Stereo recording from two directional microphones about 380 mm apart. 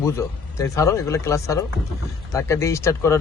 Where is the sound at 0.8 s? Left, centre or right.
Centre.